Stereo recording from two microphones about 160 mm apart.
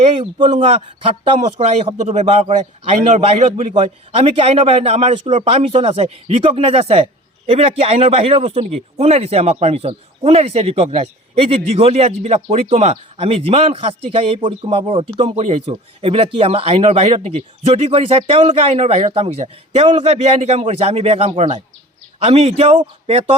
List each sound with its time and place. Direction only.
0.3 s a man's voice: 30° right (ahead or behind)